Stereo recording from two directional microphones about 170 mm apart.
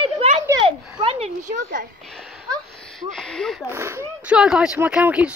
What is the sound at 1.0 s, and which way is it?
Speech, 35° right (ahead or behind).